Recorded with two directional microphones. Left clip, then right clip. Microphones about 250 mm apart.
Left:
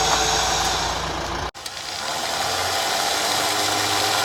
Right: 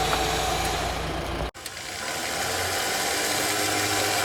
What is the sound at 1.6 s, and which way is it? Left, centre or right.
Ratchet, centre.